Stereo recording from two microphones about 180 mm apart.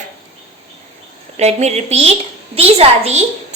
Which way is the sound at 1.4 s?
35° right (ahead or behind).